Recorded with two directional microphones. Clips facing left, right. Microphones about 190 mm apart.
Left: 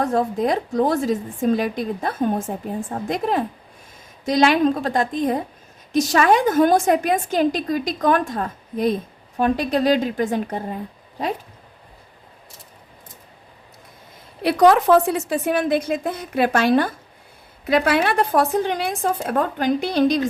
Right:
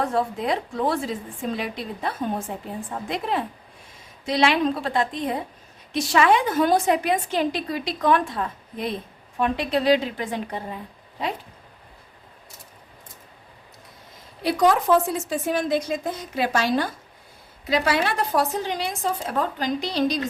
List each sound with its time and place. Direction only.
0.0 s a woman's voice: 40° left (ahead or behind)
14.4 s a woman's voice: 65° left (ahead or behind)